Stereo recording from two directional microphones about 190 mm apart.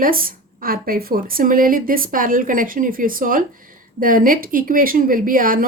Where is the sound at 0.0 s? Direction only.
50° right (ahead or behind).